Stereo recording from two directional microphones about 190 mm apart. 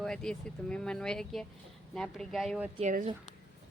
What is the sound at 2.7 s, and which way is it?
Speech, 40° right (ahead or behind).